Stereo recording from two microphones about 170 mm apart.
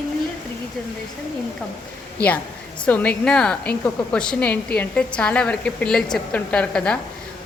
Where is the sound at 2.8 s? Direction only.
5° left (ahead or behind).